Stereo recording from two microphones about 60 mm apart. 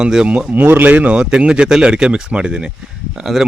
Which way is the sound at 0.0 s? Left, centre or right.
Centre.